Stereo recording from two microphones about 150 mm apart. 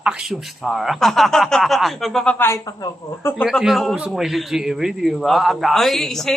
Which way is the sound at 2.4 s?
15° left (ahead or behind).